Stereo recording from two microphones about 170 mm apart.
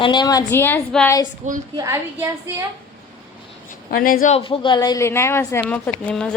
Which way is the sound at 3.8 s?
55° left (ahead or behind).